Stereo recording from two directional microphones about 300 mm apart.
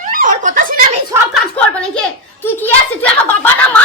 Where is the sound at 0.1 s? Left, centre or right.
Right.